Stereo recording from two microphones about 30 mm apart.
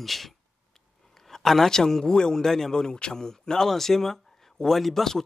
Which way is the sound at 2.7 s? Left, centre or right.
Left.